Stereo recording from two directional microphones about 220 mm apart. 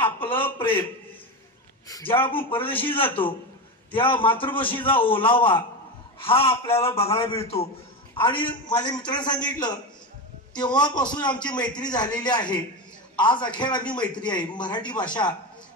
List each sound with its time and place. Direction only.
0.2 s a sound: 10° left (ahead or behind)
1.9 s a man's voice: 15° left (ahead or behind)
2.7 s a man's voice: 10° left (ahead or behind)
3.9 s a man's voice: 25° left (ahead or behind)
10.5 s a man's voice: 20° left (ahead or behind)